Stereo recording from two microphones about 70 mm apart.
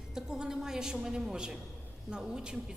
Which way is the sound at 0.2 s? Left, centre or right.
Centre.